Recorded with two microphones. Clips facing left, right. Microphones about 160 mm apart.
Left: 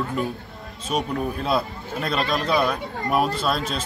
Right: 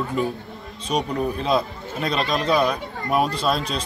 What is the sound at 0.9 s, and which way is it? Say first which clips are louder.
A man's voice: right 2 dB; 5° left (ahead or behind).